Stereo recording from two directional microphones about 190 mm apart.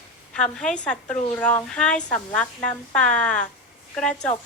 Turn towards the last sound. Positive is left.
turn(degrees=5)  # may be behind; listen again after turning